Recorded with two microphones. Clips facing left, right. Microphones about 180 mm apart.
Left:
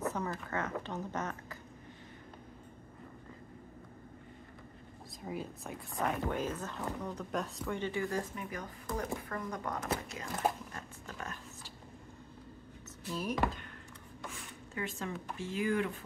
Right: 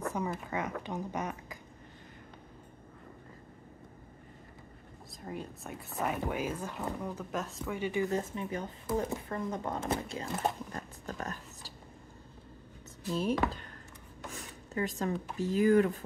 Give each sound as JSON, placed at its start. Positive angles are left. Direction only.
{"t": 0.1, "sound": "speech", "side_deg": -10}
{"t": 5.2, "sound": "speech", "side_deg": 0}
{"t": 7.9, "sound": "speech", "side_deg": -20}
{"t": 10.7, "sound": "roaring cats", "side_deg": -35}
{"t": 13.1, "sound": "speech", "side_deg": -25}
{"t": 14.3, "sound": "a sound", "side_deg": -40}
{"t": 15.3, "sound": "speech", "side_deg": -40}